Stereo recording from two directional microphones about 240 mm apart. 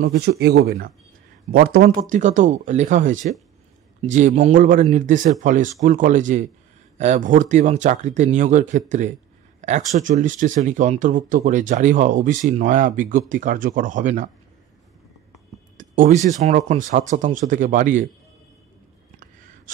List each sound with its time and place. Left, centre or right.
0.2 s speech: right
9.6 s a sound: right
9.9 s speech: right
15.8 s speech: right